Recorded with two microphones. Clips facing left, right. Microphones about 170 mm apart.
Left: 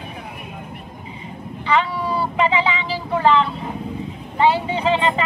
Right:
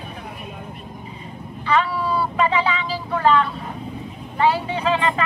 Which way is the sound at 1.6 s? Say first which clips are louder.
Even; 15° left (ahead or behind).